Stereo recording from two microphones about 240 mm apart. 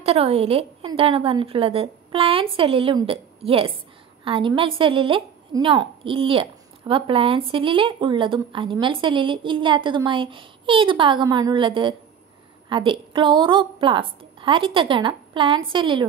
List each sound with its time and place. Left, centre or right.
0.0 s speech: right